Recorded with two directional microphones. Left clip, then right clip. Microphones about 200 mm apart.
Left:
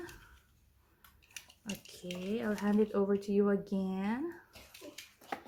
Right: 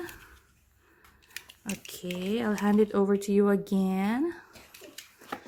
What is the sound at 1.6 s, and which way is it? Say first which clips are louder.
Speech: right 7 dB; 35° right (ahead or behind).